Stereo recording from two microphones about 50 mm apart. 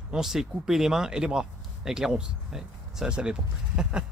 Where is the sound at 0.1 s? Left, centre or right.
Centre.